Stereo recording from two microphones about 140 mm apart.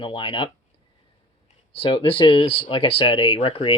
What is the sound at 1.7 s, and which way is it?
Speech, 40° left (ahead or behind).